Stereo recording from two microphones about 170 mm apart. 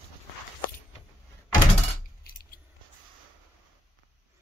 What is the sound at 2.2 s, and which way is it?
Keys jangling, 65° left (ahead or behind).